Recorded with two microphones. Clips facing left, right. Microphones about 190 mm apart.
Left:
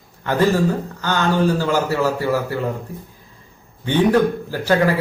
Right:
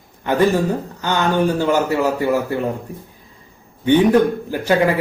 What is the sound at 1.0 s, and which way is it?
Speech, 20° right (ahead or behind).